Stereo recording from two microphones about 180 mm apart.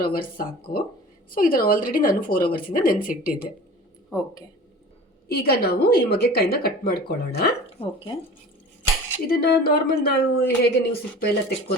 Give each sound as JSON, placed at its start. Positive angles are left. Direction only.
{"t": 0.0, "sound": "a woman's voice", "side_deg": 55}
{"t": 5.3, "sound": "a woman's voice", "side_deg": 60}
{"t": 7.8, "sound": "speech", "side_deg": 30}
{"t": 9.2, "sound": "a woman's voice", "side_deg": 60}